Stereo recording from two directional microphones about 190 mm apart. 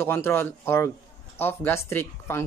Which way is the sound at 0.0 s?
10° left (ahead or behind).